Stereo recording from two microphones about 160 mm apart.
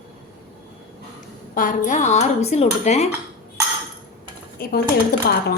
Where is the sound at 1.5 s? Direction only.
55° left (ahead or behind).